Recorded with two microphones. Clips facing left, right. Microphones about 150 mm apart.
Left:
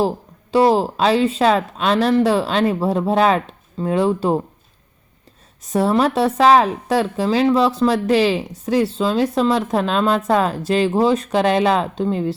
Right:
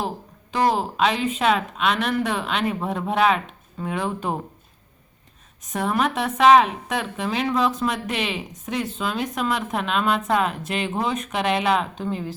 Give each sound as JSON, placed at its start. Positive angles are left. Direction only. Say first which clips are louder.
{"t": 0.5, "sound": "a woman's voice", "louder": "left 7 dB", "side_deg": 30}
{"t": 5.6, "sound": "a woman's voice", "louder": "left 7 dB", "side_deg": 30}